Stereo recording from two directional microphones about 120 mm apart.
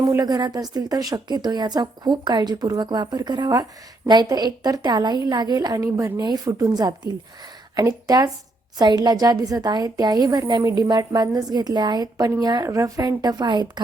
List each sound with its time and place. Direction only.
0.0 s a woman's voice: 30° right (ahead or behind)